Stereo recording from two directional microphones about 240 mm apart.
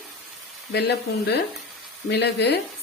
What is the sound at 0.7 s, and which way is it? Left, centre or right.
Speech, left.